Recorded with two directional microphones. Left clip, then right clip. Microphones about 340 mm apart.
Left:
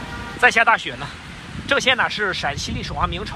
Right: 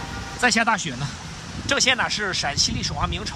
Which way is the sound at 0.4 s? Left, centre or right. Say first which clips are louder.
Left 5 dB; centre.